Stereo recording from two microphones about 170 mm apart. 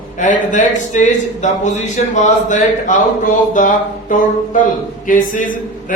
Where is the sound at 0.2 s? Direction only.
50° left (ahead or behind).